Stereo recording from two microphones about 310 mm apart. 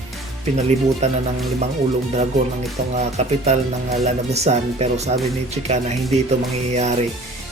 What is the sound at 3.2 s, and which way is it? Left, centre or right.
Speech, right.